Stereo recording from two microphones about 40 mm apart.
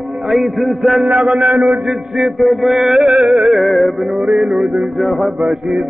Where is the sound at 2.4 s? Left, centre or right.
Centre.